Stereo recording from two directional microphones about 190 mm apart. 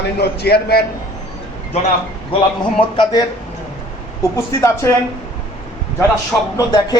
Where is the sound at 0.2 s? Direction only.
60° left (ahead or behind).